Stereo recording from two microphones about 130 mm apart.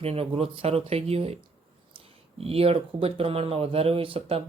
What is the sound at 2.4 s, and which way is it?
Speech, 50° right (ahead or behind).